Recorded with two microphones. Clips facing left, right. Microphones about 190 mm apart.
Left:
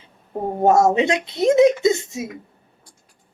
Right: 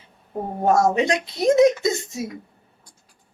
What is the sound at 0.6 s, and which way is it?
A woman's voice, 25° left (ahead or behind).